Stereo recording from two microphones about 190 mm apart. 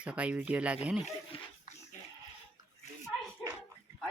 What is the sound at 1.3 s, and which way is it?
Speech, 30° left (ahead or behind).